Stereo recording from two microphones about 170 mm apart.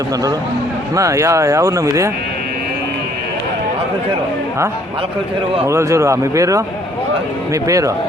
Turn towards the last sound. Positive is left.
turn(degrees=-20)  # may be behind; listen again after turning